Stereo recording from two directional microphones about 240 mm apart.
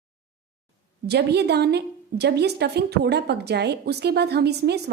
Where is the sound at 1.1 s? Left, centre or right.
Right.